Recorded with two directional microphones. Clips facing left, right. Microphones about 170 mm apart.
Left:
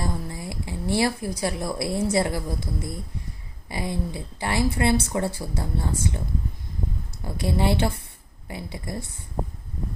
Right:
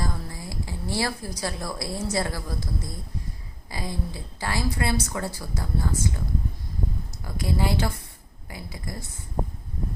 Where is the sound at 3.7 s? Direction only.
25° left (ahead or behind).